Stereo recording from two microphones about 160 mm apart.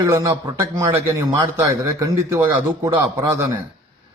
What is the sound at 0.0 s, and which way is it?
A man's voice, 20° right (ahead or behind).